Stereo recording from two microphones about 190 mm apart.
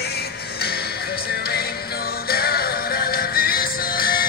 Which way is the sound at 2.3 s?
55° left (ahead or behind).